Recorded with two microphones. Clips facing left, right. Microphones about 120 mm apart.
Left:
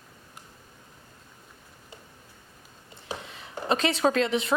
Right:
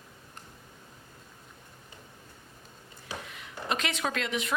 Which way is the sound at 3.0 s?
30° left (ahead or behind).